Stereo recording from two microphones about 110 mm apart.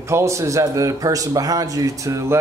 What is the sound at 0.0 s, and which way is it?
A man's voice, 25° right (ahead or behind).